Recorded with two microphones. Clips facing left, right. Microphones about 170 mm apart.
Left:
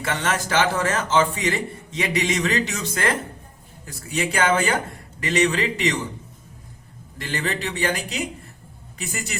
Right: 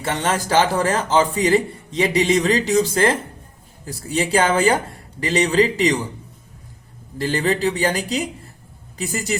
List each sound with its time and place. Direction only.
0.0 s a man's voice: 30° right (ahead or behind)
7.2 s a man's voice: 35° right (ahead or behind)